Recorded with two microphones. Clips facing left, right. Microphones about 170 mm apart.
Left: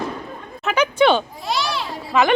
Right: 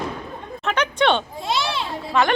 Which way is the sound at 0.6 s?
5° left (ahead or behind).